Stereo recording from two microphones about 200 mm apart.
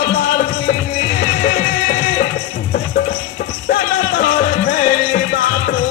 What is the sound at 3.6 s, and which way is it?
Music, 45° left (ahead or behind).